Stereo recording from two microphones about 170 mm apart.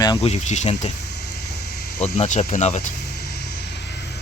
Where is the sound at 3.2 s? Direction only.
70° left (ahead or behind).